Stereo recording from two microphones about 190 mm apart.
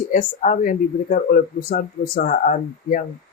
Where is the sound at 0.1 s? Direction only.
40° left (ahead or behind).